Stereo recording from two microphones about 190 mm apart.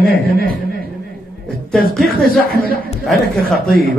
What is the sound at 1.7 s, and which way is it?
A man's voice, centre (ahead or behind).